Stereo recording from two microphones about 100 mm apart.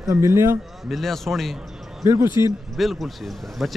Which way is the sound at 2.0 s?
35° right (ahead or behind).